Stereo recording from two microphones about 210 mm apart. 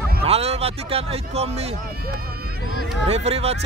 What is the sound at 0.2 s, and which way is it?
Speech, 30° right (ahead or behind).